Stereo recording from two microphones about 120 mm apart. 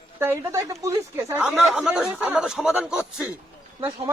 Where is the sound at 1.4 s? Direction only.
Centre (ahead or behind).